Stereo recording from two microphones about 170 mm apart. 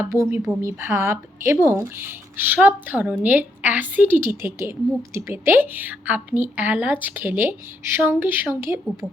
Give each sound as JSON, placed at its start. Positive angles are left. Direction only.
{"t": 0.0, "sound": "a woman's voice", "side_deg": -15}